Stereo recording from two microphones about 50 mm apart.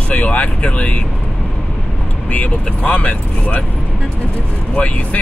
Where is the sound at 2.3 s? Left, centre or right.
Left.